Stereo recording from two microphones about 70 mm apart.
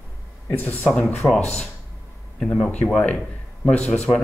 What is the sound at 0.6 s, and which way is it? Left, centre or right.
Speech, left.